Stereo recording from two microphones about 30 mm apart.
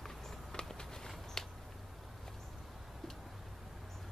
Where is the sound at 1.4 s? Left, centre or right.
Centre.